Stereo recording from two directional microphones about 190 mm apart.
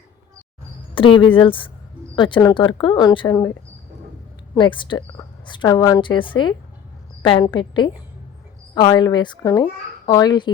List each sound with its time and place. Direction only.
0.9 s a woman's voice: 25° left (ahead or behind)
4.5 s a woman's voice: 25° left (ahead or behind)
8.7 s a woman's voice: 25° left (ahead or behind)